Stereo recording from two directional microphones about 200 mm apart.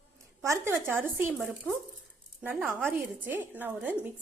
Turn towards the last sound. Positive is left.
turn(degrees=-10)  # may be behind; listen again after turning